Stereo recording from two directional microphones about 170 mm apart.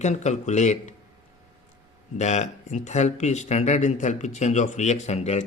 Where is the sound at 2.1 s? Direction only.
45° left (ahead or behind).